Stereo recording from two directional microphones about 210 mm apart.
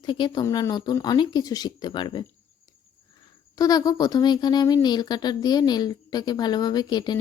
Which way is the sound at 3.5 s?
15° left (ahead or behind).